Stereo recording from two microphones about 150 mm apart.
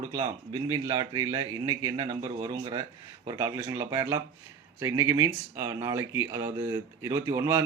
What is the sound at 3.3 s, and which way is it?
Speech, 20° right (ahead or behind).